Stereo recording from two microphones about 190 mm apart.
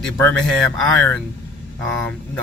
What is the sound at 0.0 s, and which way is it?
Speech, 5° left (ahead or behind).